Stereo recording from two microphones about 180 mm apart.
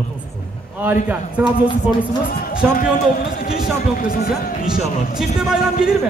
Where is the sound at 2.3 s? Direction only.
50° left (ahead or behind).